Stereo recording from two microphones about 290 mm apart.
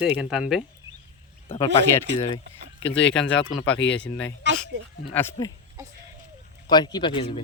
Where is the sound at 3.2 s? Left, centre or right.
Centre.